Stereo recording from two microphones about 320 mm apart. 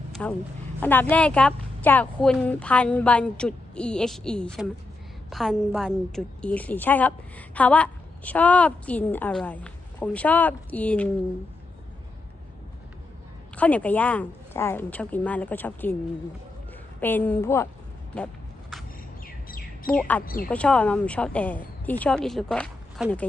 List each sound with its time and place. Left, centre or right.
0.1 s a sound: centre
0.8 s a woman's voice: centre
13.6 s a woman's voice: centre
17.0 s a woman's voice: centre
19.2 s chirp: left
19.9 s a woman's voice: centre